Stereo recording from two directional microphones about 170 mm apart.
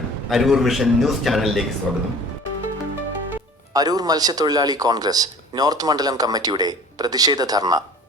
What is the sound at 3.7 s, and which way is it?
Speech, 20° right (ahead or behind).